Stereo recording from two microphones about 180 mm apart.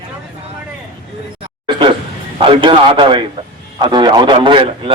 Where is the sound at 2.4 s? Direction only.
30° right (ahead or behind).